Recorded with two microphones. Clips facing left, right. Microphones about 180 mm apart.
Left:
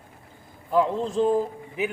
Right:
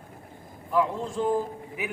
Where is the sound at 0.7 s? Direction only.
30° left (ahead or behind).